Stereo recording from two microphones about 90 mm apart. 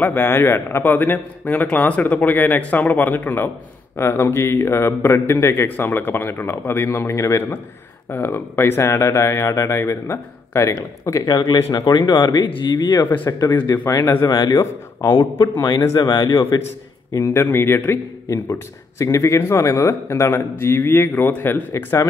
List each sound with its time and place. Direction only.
0.0 s a man's voice: 25° left (ahead or behind); by 12.4 s 55° left (ahead or behind)
12.4 s speech: 70° left (ahead or behind)
12.7 s speech: 50° left (ahead or behind)
13.0 s a man's voice: 20° left (ahead or behind)
13.7 s speech: 35° left (ahead or behind)
16.0 s speech: 55° left (ahead or behind)
17.1 s a man's voice: 30° left (ahead or behind)